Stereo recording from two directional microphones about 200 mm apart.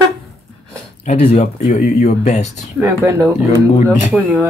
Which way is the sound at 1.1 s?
35° left (ahead or behind).